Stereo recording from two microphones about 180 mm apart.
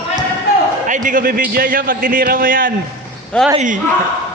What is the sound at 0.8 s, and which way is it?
A man's voice, 45° right (ahead or behind).